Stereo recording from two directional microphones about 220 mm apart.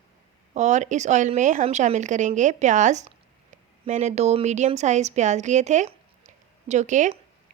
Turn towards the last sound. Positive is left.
turn(degrees=-35)  # may be behind; listen again after turning